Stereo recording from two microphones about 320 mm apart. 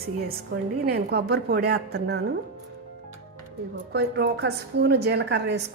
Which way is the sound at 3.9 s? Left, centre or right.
Right.